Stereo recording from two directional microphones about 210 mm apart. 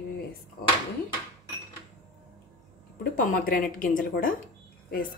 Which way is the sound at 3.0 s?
40° left (ahead or behind).